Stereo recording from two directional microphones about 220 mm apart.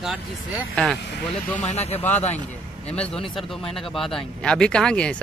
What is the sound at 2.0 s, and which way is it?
Speech, 10° left (ahead or behind).